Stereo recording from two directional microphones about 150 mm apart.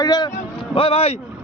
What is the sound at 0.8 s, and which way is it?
Speech, 40° left (ahead or behind).